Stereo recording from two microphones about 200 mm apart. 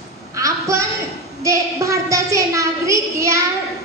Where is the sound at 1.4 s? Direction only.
15° right (ahead or behind).